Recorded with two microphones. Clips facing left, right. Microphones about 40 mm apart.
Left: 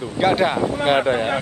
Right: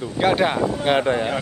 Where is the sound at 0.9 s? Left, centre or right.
Centre.